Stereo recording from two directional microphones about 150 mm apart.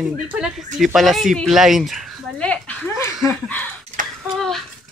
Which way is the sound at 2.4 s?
10° left (ahead or behind).